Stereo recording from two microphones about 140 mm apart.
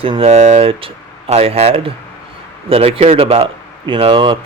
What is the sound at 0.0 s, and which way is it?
Speech, 40° right (ahead or behind).